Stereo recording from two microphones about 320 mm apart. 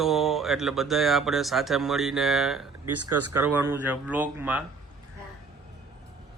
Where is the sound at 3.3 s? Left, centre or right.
Centre.